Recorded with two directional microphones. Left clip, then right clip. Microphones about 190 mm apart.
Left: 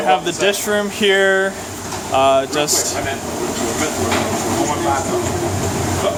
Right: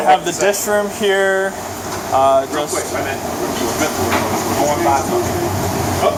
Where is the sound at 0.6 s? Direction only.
35° left (ahead or behind).